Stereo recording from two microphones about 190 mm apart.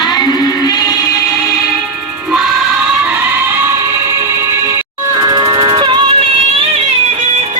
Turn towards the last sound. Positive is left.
turn(degrees=-25)  # may be behind; listen again after turning